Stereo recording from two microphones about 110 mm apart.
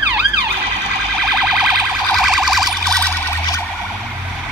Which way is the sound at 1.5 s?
5° right (ahead or behind).